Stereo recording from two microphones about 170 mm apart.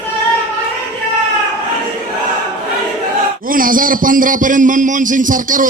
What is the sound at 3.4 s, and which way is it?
A man's voice, 55° right (ahead or behind).